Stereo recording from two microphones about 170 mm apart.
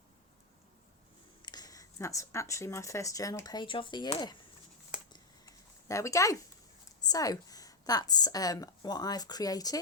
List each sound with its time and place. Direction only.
1.4 s speech: 25° left (ahead or behind)
5.1 s a sound: 20° left (ahead or behind)
7.0 s a woman's voice: 20° left (ahead or behind)